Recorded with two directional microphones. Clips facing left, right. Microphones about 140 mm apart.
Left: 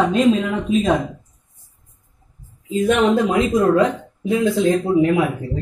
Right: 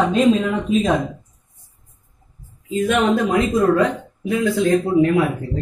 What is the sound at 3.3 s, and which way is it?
Speech, 20° left (ahead or behind).